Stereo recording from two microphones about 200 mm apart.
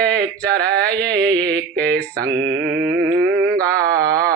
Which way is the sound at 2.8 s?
60° right (ahead or behind).